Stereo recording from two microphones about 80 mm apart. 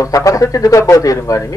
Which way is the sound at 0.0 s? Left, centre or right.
Left.